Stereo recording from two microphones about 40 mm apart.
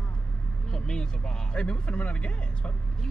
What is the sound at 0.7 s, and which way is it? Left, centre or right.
Speech, left.